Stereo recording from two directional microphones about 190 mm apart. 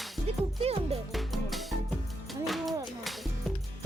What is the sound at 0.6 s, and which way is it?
Speech, 30° right (ahead or behind).